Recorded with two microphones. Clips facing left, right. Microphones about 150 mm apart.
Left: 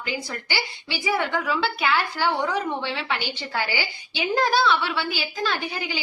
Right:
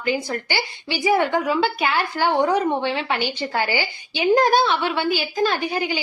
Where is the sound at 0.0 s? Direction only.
50° right (ahead or behind).